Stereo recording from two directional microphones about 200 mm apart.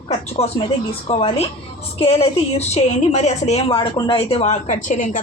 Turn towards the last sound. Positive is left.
turn(degrees=40)  # may be behind; listen again after turning